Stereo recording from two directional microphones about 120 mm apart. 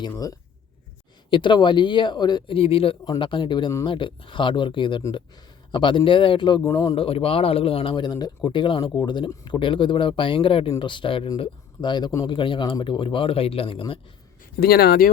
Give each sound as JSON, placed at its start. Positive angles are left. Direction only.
{"t": 1.3, "sound": "speech", "side_deg": 40}
{"t": 2.6, "sound": "speech", "side_deg": 55}
{"t": 3.0, "sound": "speech", "side_deg": 35}
{"t": 8.8, "sound": "speech", "side_deg": 30}